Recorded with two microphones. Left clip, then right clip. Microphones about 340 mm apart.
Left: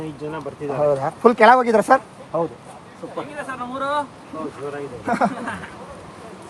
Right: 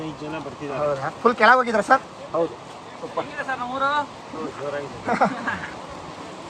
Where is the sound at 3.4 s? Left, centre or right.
Centre.